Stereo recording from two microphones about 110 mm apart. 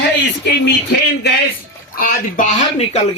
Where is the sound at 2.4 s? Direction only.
85° left.